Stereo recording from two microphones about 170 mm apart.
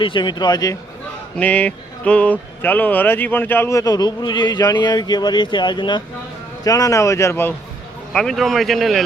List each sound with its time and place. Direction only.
0.0 s speech: 30° left (ahead or behind)
1.4 s speech: 10° left (ahead or behind)
8.1 s speech: 5° left (ahead or behind)